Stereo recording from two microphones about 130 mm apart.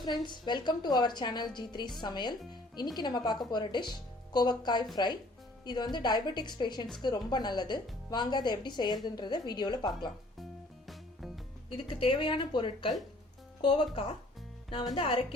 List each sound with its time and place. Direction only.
0.0 s speech: 35° left (ahead or behind)
11.9 s a woman's voice: 45° left (ahead or behind)